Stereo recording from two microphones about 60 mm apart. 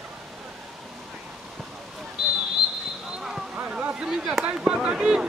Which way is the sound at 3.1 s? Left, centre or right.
Centre.